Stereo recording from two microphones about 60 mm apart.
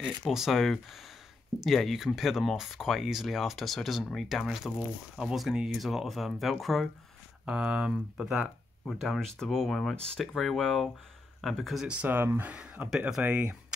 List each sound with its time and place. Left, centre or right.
0.3 s speech: centre
7.4 s speech: centre
8.2 s speech: centre
8.8 s speech: centre
11.8 s speech: centre